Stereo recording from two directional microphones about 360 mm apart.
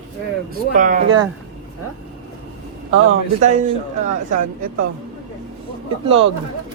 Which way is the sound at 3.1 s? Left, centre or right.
Centre.